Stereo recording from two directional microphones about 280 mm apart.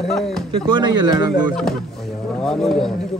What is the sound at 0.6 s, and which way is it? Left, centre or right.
Speech, centre.